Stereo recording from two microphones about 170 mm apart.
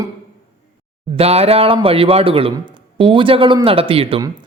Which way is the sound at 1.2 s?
35° right (ahead or behind).